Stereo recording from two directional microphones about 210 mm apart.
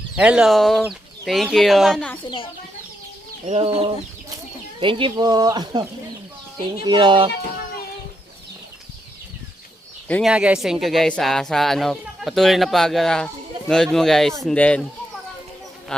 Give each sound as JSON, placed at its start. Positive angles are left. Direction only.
{"t": 0.2, "sound": "speech", "side_deg": -5}
{"t": 2.2, "sound": "speech", "side_deg": 25}
{"t": 3.4, "sound": "speech", "side_deg": -30}
{"t": 10.1, "sound": "speech", "side_deg": 0}
{"t": 15.9, "sound": "speech", "side_deg": 5}